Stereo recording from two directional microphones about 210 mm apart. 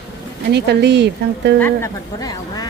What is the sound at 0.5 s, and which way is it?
Speech, 55° right (ahead or behind).